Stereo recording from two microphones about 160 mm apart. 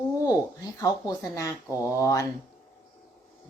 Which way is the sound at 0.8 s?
20° left (ahead or behind).